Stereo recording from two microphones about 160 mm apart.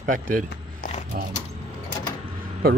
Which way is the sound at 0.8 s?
45° left (ahead or behind).